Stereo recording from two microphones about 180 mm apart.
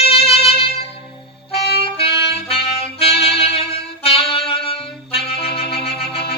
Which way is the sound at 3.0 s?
30° left (ahead or behind).